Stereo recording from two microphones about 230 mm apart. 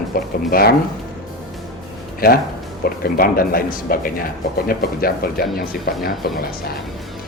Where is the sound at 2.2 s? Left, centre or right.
Left.